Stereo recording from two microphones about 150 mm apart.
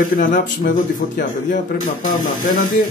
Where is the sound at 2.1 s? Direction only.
65° left (ahead or behind).